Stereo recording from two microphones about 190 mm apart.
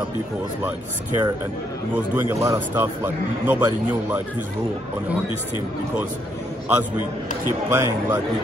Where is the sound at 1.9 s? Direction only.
10° right (ahead or behind).